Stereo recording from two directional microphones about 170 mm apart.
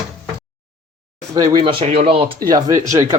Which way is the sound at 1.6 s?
30° right (ahead or behind).